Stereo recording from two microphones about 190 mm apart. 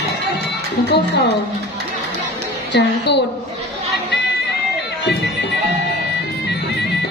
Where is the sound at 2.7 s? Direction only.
60° left (ahead or behind).